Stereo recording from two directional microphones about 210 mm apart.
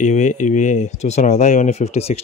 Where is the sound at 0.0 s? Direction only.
35° left (ahead or behind).